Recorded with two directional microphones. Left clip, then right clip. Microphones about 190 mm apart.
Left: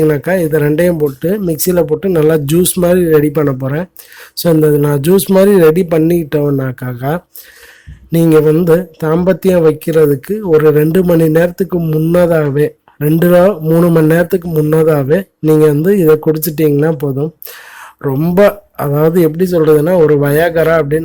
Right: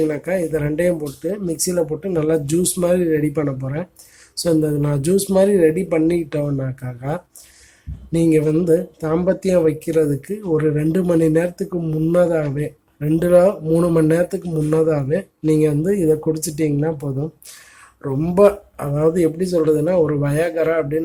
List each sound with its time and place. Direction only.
0.1 s speech: 40° left (ahead or behind)